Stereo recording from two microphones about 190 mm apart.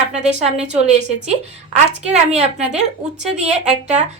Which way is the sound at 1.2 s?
40° right (ahead or behind).